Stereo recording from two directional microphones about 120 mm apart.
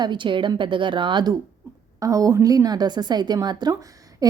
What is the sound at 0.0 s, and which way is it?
Speech, 40° right (ahead or behind).